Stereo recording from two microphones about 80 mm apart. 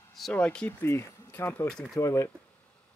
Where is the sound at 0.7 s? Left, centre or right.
Left.